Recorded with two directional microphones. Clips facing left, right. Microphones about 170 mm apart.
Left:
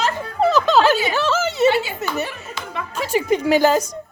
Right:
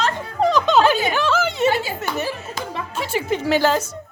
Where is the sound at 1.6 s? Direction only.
40° right (ahead or behind).